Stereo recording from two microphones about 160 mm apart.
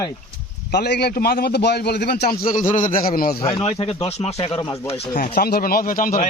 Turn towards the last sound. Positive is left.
turn(degrees=60)  # may be behind; listen again after turning